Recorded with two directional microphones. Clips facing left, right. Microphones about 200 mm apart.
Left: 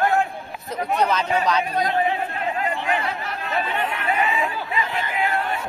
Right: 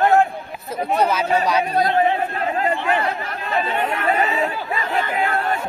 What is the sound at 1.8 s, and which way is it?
Chatter, 40° right (ahead or behind).